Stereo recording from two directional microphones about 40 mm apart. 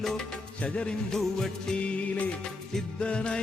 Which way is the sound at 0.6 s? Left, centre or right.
Left.